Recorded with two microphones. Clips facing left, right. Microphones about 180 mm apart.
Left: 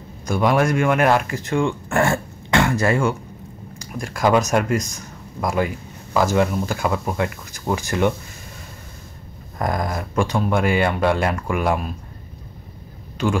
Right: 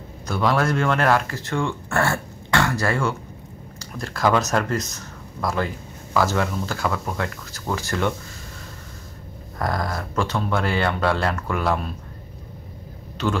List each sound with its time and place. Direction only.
0.3 s speech: 15° left (ahead or behind)
9.6 s speech: 20° left (ahead or behind)
13.2 s speech: 10° left (ahead or behind)